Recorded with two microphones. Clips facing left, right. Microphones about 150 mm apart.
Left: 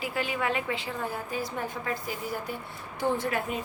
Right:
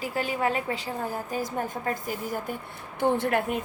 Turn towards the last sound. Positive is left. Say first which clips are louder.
# right 4 dB
turn(degrees=-60)  # may be behind; listen again after turning